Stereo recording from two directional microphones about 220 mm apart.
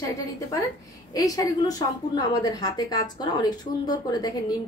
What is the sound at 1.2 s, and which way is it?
A woman's voice, 15° left (ahead or behind).